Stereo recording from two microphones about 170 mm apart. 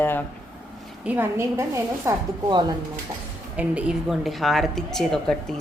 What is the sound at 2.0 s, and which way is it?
Speech, 25° right (ahead or behind).